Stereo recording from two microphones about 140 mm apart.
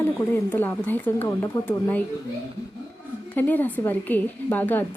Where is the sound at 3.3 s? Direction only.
15° left (ahead or behind).